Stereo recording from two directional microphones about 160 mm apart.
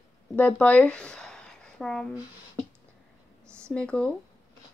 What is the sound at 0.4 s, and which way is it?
Speech, 10° left (ahead or behind).